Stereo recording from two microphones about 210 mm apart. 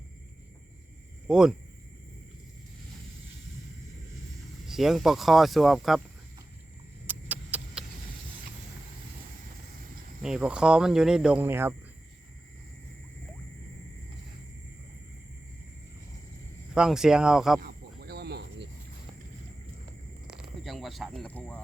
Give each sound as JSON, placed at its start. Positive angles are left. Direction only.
{"t": 1.3, "sound": "cricket", "side_deg": -5}
{"t": 4.6, "sound": "cricket", "side_deg": 0}
{"t": 7.1, "sound": "a sound", "side_deg": -5}
{"t": 10.2, "sound": "cricket", "side_deg": -5}
{"t": 16.7, "sound": "cricket", "side_deg": -5}
{"t": 17.6, "sound": "cricket", "side_deg": -50}
{"t": 20.2, "sound": "a sound", "side_deg": 0}